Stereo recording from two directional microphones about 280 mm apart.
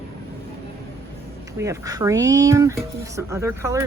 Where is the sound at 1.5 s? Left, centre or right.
Centre.